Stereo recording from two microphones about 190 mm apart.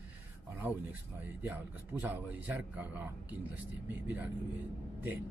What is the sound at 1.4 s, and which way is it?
A man's voice, 10° right (ahead or behind).